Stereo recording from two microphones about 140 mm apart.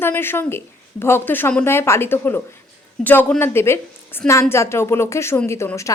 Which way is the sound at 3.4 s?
15° left (ahead or behind).